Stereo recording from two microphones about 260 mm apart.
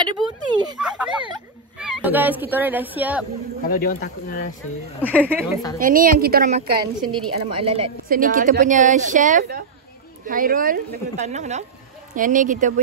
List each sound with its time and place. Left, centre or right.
0.1 s speech: centre
0.7 s speech: centre
3.6 s speech: left
5.8 s speech: right
6.7 s a woman's voice: centre
8.1 s a woman's voice: right